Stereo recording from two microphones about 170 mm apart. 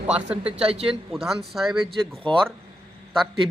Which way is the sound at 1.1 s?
Centre (ahead or behind).